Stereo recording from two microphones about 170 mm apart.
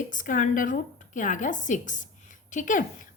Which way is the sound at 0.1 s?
50° left (ahead or behind).